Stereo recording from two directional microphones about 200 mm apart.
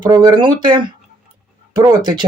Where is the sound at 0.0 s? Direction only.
20° right (ahead or behind).